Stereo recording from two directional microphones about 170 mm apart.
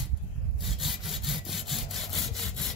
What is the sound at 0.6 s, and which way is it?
Sawing, centre (ahead or behind).